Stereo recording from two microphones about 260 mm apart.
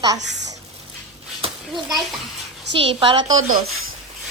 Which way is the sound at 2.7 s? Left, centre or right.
Right.